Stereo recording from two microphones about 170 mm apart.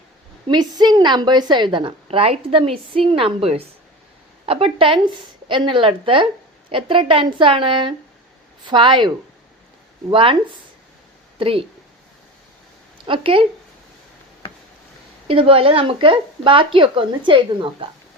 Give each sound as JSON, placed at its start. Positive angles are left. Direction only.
{"t": 0.4, "sound": "a woman's voice", "side_deg": -25}
{"t": 13.1, "sound": "a woman's voice", "side_deg": -30}
{"t": 15.3, "sound": "a woman's voice", "side_deg": -30}